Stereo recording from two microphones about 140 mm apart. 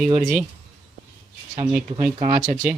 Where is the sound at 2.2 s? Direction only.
35° right (ahead or behind).